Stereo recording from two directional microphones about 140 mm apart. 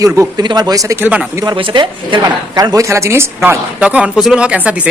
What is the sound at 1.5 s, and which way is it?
Speech, 35° right (ahead or behind).